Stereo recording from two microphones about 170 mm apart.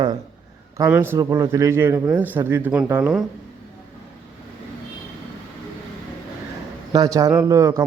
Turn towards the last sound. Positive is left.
turn(degrees=-20)  # may be behind; listen again after turning